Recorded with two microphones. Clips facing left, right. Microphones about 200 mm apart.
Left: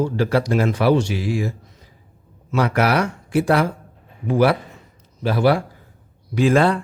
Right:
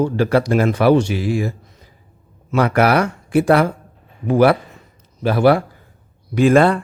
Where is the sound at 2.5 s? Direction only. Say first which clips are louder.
Right 4 dB; 55° right (ahead or behind).